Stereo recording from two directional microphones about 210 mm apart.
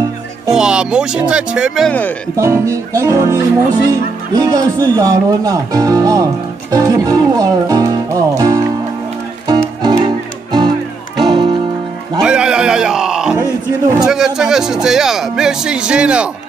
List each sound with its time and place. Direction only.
0.5 s speech: 5° right (ahead or behind)
2.3 s speech: 15° right (ahead or behind)
6.7 s music: 15° right (ahead or behind)
9.8 s music: 20° right (ahead or behind)
12.2 s a sound: 5° right (ahead or behind)
14.0 s speech: 5° right (ahead or behind)